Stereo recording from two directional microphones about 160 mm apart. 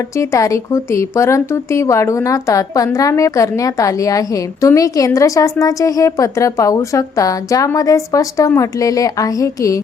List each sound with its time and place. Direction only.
0.2 s speech: 20° left (ahead or behind)